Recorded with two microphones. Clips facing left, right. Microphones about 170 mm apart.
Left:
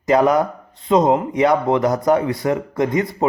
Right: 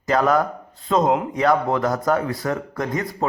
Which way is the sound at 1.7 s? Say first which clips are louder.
Left 4 dB; 20° left (ahead or behind).